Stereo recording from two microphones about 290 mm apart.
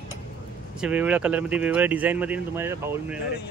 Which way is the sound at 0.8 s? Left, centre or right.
Centre.